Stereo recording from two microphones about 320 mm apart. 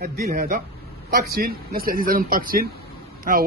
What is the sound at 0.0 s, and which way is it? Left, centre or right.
Speech, right.